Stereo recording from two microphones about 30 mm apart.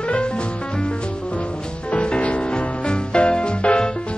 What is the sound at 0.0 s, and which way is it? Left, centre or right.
Music, left.